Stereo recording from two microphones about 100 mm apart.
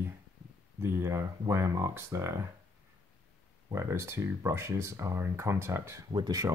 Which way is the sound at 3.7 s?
30° right (ahead or behind).